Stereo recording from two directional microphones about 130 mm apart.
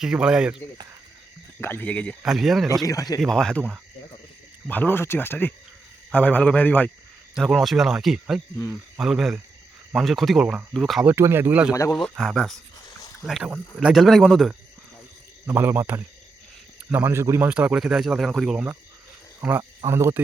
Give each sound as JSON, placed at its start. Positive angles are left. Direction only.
{"t": 0.0, "sound": "speech", "side_deg": -5}
{"t": 1.6, "sound": "speech", "side_deg": 15}
{"t": 2.2, "sound": "speech", "side_deg": 0}
{"t": 2.8, "sound": "speech", "side_deg": 25}
{"t": 3.2, "sound": "speech", "side_deg": 5}
{"t": 4.7, "sound": "speech", "side_deg": 15}
{"t": 7.3, "sound": "speech", "side_deg": 0}
{"t": 11.0, "sound": "speech", "side_deg": -20}
{"t": 11.7, "sound": "speech", "side_deg": 25}
{"t": 11.9, "sound": "speech", "side_deg": 5}
{"t": 15.4, "sound": "speech", "side_deg": -15}
{"t": 17.5, "sound": "speech", "side_deg": -10}